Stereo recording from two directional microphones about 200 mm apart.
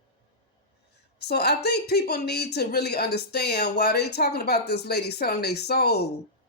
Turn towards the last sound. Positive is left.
turn(degrees=55)  # may be behind; listen again after turning